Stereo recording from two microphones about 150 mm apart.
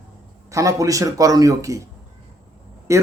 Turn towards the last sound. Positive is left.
turn(degrees=-20)  # may be behind; listen again after turning